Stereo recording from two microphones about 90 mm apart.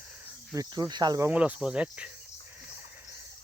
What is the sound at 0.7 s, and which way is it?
Speech, 55° right (ahead or behind).